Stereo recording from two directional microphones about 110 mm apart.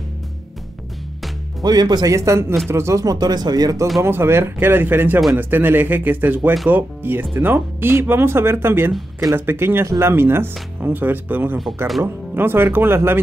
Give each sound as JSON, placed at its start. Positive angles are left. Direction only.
{"t": 1.6, "sound": "speech", "side_deg": -40}
{"t": 4.0, "sound": "speech", "side_deg": -20}